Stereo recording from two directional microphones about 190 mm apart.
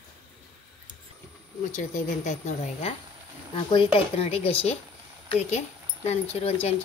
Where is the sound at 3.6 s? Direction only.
30° left (ahead or behind).